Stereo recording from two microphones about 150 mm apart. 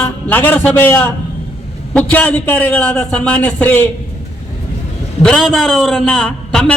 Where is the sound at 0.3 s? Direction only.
15° left (ahead or behind).